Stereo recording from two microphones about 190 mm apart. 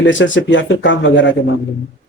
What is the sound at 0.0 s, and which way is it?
Speech, 75° left (ahead or behind).